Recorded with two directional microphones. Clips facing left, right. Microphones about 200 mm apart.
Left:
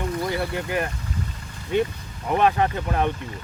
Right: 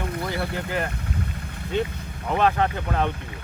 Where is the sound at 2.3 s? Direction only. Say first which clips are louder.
Left 1 dB; 15° left (ahead or behind).